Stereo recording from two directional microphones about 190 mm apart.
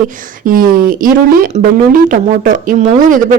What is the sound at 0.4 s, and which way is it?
A woman's voice, 50° right (ahead or behind).